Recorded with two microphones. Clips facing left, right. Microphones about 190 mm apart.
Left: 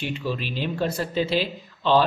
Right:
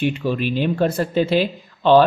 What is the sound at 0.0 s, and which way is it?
Speech, 55° right (ahead or behind).